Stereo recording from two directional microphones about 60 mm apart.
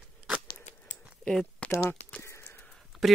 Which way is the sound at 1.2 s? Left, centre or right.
Centre.